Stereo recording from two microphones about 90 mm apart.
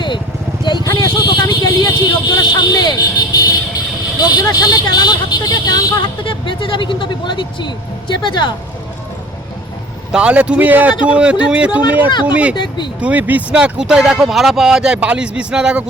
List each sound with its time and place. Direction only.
0.6 s vehicle: 55° left (ahead or behind)
0.9 s a sound: 45° left (ahead or behind)
4.2 s speech: 45° left (ahead or behind)
6.2 s speech: 70° left (ahead or behind)
10.1 s speech: 10° right (ahead or behind)
12.5 s speech: 60° left (ahead or behind)
13.0 s speech: 15° right (ahead or behind)